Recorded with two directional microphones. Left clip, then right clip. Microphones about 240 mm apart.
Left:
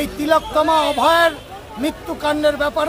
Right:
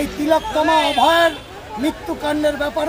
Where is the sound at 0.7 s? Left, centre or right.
Left.